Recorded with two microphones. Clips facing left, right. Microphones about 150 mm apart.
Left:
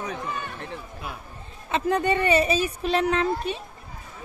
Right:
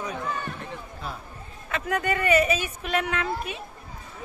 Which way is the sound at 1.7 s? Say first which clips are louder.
Left 4 dB; 30° left (ahead or behind).